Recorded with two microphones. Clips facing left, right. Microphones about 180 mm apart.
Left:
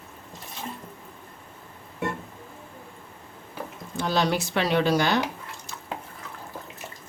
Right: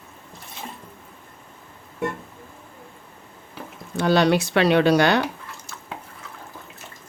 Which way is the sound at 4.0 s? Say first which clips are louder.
Right 6 dB; 70° right (ahead or behind).